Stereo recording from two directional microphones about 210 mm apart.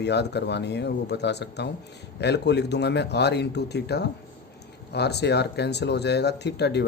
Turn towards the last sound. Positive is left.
turn(degrees=55)  # may be behind; listen again after turning